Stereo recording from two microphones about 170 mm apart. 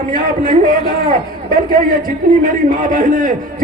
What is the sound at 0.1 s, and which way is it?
A man's voice, 55° right (ahead or behind).